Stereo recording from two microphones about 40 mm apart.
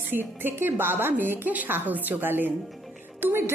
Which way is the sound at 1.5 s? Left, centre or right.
Right.